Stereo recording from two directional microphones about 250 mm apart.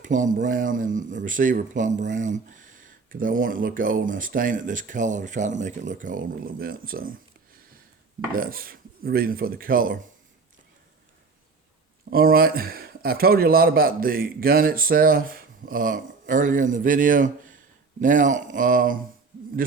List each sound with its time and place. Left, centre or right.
0.0 s mantra: right
0.4 s a man's voice: right
8.3 s a man's voice: right
12.1 s a man's voice: right